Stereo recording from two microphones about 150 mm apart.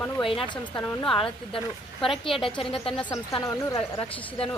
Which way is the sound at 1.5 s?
Centre (ahead or behind).